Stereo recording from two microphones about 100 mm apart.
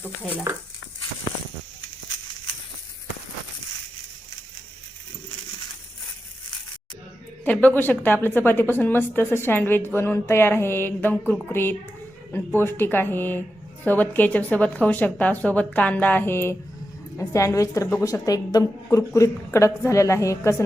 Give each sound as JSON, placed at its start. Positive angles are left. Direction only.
{"t": 7.4, "sound": "a woman's voice", "side_deg": 15}